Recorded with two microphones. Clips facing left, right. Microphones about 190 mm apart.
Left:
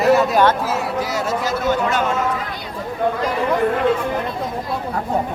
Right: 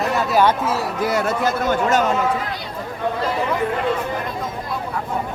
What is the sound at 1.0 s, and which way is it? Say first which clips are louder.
A man's voice: right 2 dB; 55° right (ahead or behind).